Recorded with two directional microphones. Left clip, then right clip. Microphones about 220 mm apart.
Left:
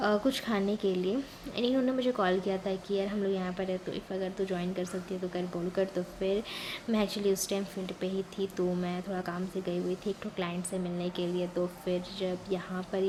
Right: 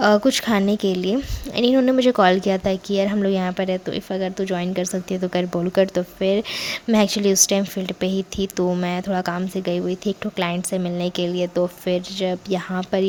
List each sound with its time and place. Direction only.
0.0 s a woman's voice: 45° right (ahead or behind)